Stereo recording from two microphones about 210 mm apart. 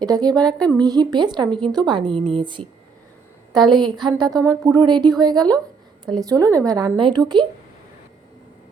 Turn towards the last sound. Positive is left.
turn(degrees=-20)  # may be behind; listen again after turning